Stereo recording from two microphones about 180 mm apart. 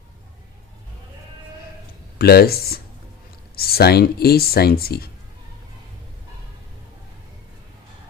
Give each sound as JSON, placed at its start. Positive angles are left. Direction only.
{"t": 2.1, "sound": "speech", "side_deg": 60}